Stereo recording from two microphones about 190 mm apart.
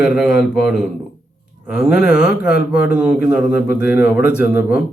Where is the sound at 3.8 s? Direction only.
10° right (ahead or behind).